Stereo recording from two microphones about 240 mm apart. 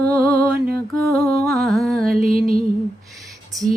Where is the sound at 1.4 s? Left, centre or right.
Centre.